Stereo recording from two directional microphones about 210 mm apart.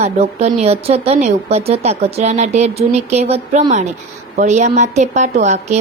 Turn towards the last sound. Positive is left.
turn(degrees=-35)  # may be behind; listen again after turning